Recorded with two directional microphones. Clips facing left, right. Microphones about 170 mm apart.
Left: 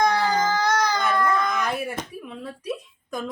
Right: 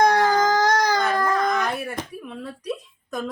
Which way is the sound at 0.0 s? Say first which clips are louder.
Right 3 dB; 45° right (ahead or behind).